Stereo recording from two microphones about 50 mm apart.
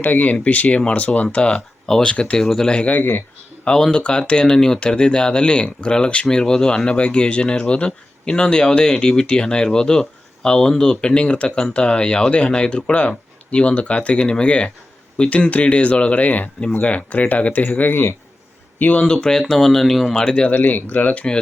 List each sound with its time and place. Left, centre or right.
0.0 s speech: left; by 2.8 s centre
3.0 s speech: left
3.6 s speech: centre; by 19.0 s left
19.0 s speech: centre
20.1 s speech: centre